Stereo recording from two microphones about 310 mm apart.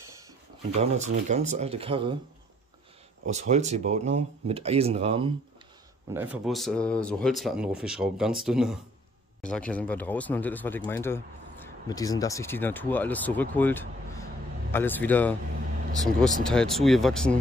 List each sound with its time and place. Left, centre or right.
0.7 s speech: right
3.3 s speech: right
6.1 s speech: centre
16.4 s speech: centre